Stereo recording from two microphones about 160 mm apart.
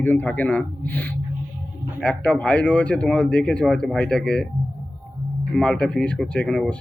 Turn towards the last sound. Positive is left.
turn(degrees=5)  # may be behind; listen again after turning